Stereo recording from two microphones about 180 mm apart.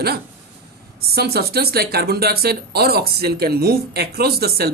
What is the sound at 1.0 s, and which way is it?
Speech, 60° right (ahead or behind).